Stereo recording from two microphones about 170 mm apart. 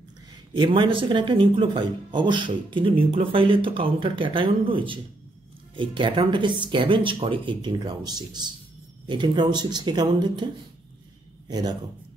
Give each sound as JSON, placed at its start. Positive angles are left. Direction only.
{"t": 0.5, "sound": "speech", "side_deg": -30}